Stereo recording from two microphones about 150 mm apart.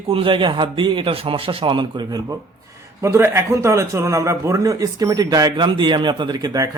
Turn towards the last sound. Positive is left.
turn(degrees=-25)  # may be behind; listen again after turning